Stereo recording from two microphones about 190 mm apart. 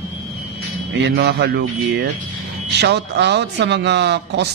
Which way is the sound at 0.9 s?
60° right (ahead or behind).